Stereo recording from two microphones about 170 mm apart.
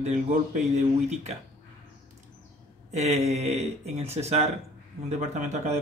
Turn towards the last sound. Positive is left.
turn(degrees=-45)  # may be behind; listen again after turning